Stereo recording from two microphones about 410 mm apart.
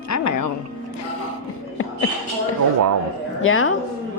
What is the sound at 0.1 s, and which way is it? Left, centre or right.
Music, left.